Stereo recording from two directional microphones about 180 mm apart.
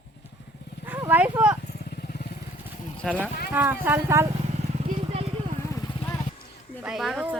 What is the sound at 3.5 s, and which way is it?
Speech, 10° right (ahead or behind).